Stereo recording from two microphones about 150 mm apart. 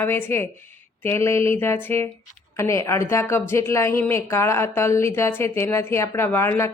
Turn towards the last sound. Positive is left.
turn(degrees=15)  # may be behind; listen again after turning